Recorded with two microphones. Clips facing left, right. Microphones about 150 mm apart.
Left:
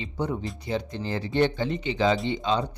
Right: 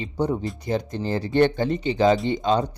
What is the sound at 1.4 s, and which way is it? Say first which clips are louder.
Speech: right 4 dB; 50° right (ahead or behind).